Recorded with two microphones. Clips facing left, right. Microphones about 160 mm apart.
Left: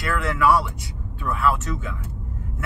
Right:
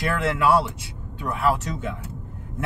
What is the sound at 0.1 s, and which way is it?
Speech, 25° right (ahead or behind).